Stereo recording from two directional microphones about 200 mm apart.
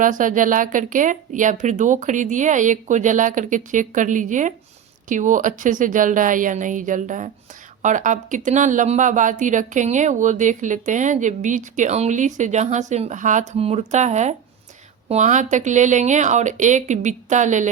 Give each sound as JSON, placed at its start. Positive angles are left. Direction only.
{"t": 0.0, "sound": "speech", "side_deg": -40}